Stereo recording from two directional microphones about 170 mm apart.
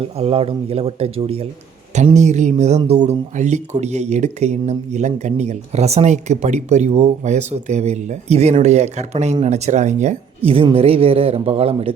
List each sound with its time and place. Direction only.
0.2 s speech: 35° right (ahead or behind)